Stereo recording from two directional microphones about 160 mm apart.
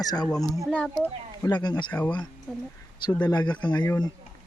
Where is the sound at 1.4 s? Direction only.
25° left (ahead or behind).